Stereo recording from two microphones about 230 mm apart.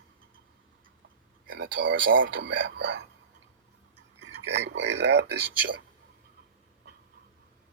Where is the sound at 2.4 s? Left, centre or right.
Right.